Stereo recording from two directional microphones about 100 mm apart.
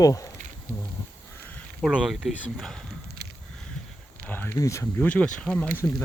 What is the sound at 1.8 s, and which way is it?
Speech, 5° right (ahead or behind).